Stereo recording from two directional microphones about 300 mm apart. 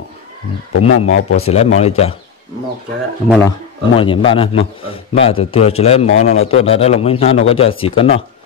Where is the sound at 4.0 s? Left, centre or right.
Centre.